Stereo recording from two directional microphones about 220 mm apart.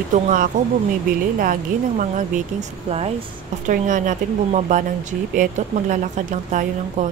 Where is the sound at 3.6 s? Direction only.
35° right (ahead or behind).